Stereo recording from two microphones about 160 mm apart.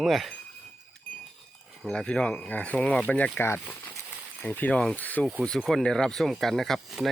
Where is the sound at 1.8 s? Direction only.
5° left (ahead or behind).